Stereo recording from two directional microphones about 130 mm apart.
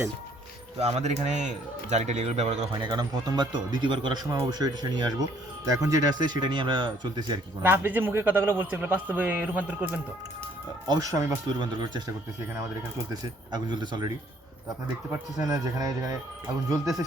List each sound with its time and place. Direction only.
0.8 s speech: 55° right (ahead or behind)
2.7 s speech: 35° right (ahead or behind)
7.6 s speech: 15° right (ahead or behind)
10.8 s speech: 30° right (ahead or behind)
13.5 s speech: 35° right (ahead or behind)
15.4 s speech: 30° right (ahead or behind)